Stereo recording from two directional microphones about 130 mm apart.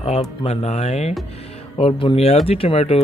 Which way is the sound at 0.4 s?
50° left (ahead or behind).